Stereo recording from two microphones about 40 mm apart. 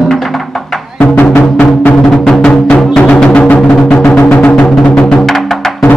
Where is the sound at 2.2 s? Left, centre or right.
Centre.